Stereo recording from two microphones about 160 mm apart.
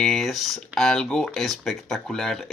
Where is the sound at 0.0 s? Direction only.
Centre (ahead or behind).